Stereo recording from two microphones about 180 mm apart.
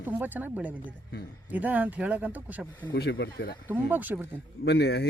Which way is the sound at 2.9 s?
70° left (ahead or behind).